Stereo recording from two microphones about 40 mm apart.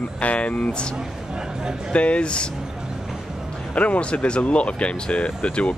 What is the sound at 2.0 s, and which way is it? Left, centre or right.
Speech, left.